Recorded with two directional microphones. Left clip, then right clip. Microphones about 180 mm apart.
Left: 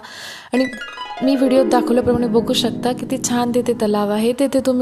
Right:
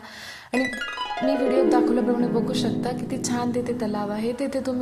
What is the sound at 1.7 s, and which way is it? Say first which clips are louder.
Speech: left 5 dB; 45° left (ahead or behind).